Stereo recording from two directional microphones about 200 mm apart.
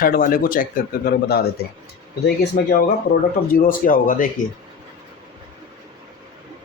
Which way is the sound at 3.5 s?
45° left (ahead or behind).